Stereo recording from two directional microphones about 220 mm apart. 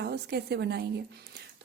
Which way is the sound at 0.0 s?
50° right (ahead or behind).